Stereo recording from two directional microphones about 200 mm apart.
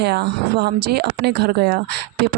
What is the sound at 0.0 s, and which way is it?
Speech, 55° right (ahead or behind).